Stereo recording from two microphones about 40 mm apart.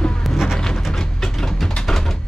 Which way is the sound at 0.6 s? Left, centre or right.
Centre.